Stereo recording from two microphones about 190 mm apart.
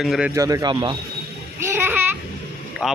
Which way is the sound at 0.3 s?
20° right (ahead or behind).